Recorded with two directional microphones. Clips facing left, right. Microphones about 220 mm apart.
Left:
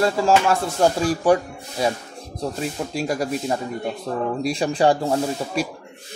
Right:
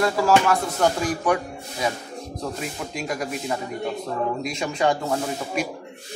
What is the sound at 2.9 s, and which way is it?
Speech, 35° left (ahead or behind).